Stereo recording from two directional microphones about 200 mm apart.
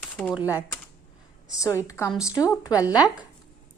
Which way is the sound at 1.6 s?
15° left (ahead or behind).